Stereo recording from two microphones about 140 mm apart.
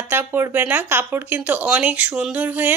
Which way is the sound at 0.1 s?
15° right (ahead or behind).